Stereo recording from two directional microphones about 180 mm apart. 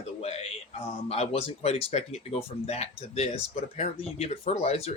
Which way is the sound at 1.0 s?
35° left (ahead or behind).